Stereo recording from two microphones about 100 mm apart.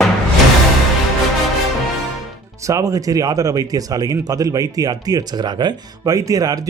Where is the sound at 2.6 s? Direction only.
35° right (ahead or behind).